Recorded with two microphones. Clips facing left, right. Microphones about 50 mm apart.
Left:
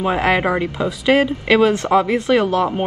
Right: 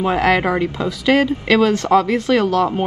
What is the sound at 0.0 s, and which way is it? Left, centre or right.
Speech, centre.